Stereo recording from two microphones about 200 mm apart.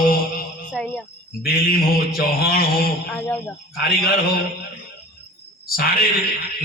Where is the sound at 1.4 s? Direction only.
50° left (ahead or behind).